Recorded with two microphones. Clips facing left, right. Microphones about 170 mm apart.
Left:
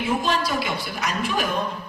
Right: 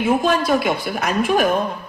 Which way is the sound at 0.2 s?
50° right (ahead or behind).